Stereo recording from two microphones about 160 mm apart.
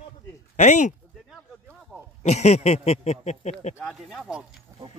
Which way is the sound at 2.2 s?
45° left (ahead or behind).